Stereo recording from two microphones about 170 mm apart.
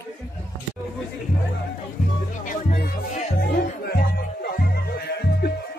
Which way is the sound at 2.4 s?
60° left (ahead or behind).